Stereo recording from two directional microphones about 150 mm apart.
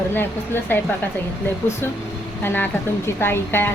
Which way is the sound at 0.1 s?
15° left (ahead or behind).